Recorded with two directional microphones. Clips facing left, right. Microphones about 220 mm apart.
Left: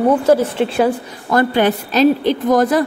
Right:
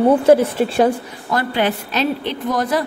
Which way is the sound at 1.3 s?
50° left (ahead or behind).